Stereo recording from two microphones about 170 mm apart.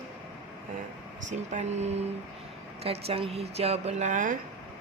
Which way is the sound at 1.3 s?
45° right (ahead or behind).